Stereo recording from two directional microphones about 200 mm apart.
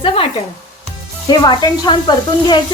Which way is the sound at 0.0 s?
25° left (ahead or behind).